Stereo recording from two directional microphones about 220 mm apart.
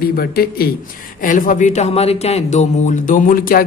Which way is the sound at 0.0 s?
45° left (ahead or behind).